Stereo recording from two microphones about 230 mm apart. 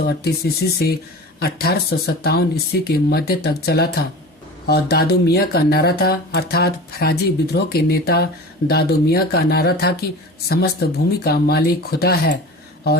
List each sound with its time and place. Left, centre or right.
0.0 s speech: left